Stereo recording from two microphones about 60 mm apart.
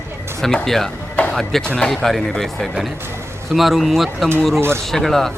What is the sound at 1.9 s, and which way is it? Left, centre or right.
Speech, centre.